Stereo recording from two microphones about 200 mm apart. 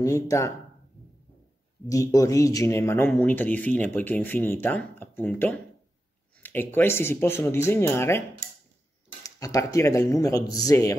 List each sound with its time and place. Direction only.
0.0 s speech: 15° left (ahead or behind)
1.9 s speech: 15° left (ahead or behind)
9.2 s speech: 15° left (ahead or behind)